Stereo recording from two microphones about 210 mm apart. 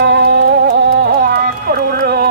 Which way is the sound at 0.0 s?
50° right (ahead or behind).